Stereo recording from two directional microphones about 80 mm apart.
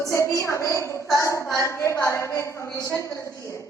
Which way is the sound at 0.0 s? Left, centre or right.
Left.